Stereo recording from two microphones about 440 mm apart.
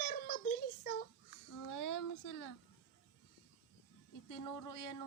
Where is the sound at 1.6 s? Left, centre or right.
Left.